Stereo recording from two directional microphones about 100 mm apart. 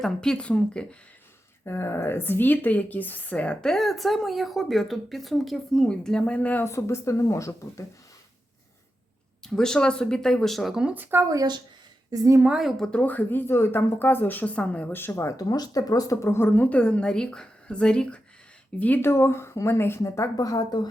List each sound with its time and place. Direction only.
0.0 s speech: 5° left (ahead or behind)
1.6 s speech: 25° left (ahead or behind)
6.7 s speech: 30° left (ahead or behind)
9.4 s speech: 5° left (ahead or behind)
10.9 s speech: 20° right (ahead or behind)
11.3 s speech: 40° right (ahead or behind)
12.5 s speech: 5° right (ahead or behind)
12.8 s speech: 10° left (ahead or behind)
18.8 s speech: 20° left (ahead or behind); by 20.8 s 35° left (ahead or behind)